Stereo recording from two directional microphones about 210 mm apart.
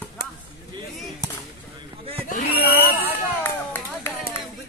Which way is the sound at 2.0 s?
25° right (ahead or behind).